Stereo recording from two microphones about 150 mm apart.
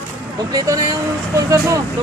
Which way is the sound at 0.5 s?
25° right (ahead or behind).